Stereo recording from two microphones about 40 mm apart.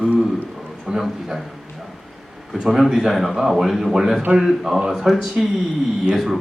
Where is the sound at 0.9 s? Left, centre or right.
Centre.